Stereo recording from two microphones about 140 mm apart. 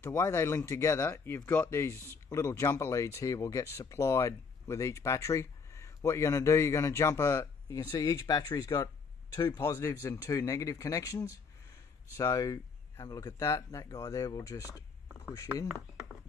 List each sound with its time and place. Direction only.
0.0 s speech: 15° left (ahead or behind)